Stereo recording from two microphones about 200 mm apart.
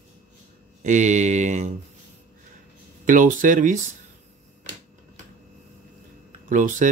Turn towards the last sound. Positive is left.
turn(degrees=-40)  # may be behind; listen again after turning